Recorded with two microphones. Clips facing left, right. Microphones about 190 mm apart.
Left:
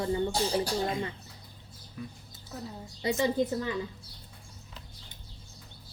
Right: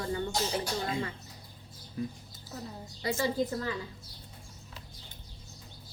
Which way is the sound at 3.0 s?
20° left (ahead or behind).